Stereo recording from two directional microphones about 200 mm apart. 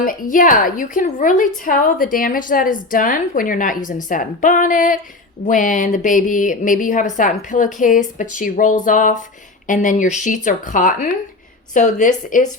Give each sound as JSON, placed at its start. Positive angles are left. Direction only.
{"t": 0.0, "sound": "a woman's voice", "side_deg": 45}